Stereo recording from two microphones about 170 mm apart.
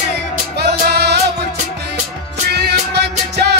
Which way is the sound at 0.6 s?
75° right (ahead or behind).